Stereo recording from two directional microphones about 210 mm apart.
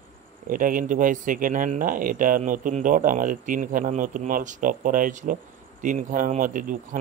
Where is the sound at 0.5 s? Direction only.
40° right (ahead or behind).